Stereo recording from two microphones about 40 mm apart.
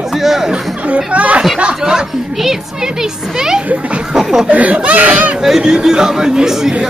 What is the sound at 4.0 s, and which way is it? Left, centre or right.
Speech, centre.